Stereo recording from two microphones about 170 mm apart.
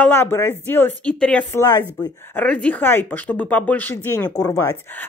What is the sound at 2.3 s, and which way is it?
Speech, 10° left (ahead or behind).